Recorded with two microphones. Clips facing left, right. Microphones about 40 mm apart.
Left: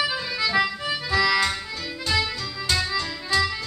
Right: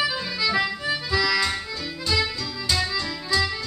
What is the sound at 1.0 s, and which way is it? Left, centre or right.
Music, left.